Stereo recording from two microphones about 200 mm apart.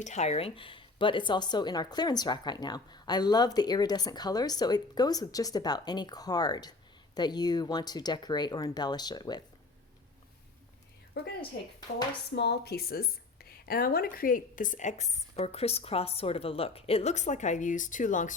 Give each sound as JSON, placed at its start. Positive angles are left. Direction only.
{"t": 0.0, "sound": "speech", "side_deg": 35}
{"t": 12.3, "sound": "a woman's voice", "side_deg": 55}